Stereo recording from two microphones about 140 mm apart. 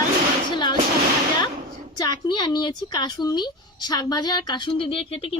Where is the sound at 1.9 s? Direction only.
30° left (ahead or behind).